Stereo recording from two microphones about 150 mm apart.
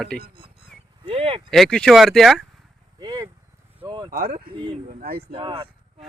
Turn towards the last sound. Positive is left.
turn(degrees=-35)  # may be behind; listen again after turning